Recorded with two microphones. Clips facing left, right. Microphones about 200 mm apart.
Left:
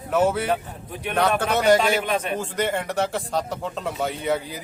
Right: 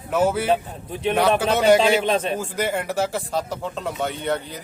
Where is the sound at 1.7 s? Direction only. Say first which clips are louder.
Right 3 dB; 25° right (ahead or behind).